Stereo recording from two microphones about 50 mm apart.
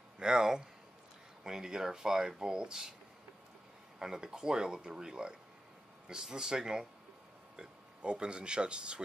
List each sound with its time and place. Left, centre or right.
0.2 s speech: centre
4.0 s speech: centre